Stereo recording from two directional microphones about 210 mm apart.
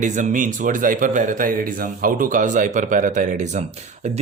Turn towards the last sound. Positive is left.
turn(degrees=-30)  # may be behind; listen again after turning